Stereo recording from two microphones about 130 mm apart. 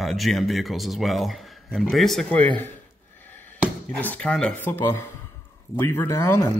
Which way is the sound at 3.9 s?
10° left (ahead or behind).